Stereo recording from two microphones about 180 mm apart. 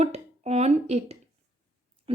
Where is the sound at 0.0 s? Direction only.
35° right (ahead or behind).